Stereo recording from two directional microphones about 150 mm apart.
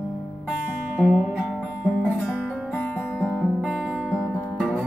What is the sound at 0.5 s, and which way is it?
Music, centre (ahead or behind).